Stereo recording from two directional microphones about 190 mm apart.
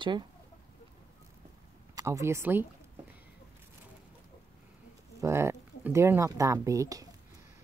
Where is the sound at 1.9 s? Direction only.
15° right (ahead or behind).